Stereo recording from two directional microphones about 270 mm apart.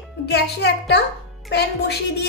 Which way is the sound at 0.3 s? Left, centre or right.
Left.